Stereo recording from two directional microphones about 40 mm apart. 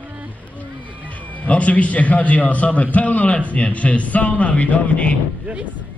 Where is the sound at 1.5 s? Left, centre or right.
Left.